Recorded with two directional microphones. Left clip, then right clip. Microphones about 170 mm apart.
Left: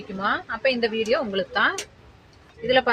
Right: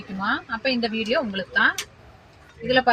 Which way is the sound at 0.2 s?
25° left (ahead or behind).